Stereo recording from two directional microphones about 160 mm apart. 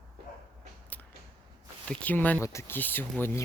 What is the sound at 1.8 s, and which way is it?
Speech, 10° left (ahead or behind).